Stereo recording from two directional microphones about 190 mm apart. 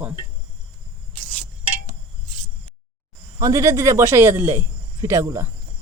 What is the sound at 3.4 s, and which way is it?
Speech, 20° right (ahead or behind).